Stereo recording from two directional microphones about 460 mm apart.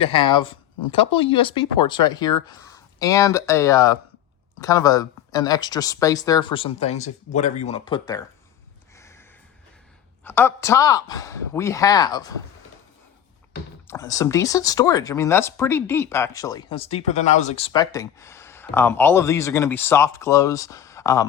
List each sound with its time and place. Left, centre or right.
0.0 s speech: centre
9.0 s a sound: centre
10.2 s speech: centre
13.8 s speech: centre